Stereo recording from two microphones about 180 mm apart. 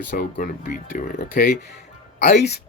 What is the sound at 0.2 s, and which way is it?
Speech, 50° left (ahead or behind).